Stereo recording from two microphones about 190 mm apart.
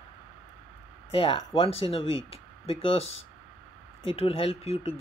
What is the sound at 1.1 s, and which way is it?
Speech, 30° left (ahead or behind).